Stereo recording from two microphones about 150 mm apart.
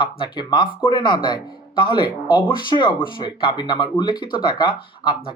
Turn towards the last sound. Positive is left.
turn(degrees=30)  # may be behind; listen again after turning